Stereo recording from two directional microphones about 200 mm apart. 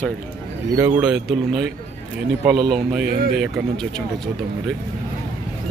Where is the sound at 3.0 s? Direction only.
50° right (ahead or behind).